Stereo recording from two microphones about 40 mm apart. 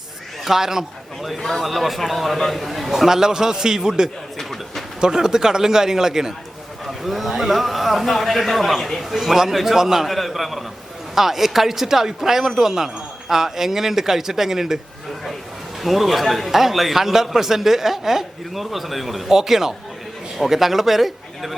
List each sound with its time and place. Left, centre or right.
0.4 s a man's voice: centre
3.1 s speech: centre
4.4 s a sound: centre
4.9 s speech: centre
6.8 s a man's voice: centre
15.8 s a man's voice: centre